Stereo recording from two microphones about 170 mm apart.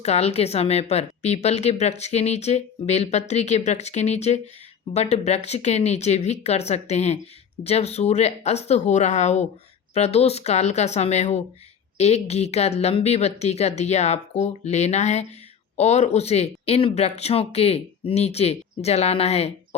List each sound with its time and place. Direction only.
0.0 s a woman's voice: 40° left (ahead or behind)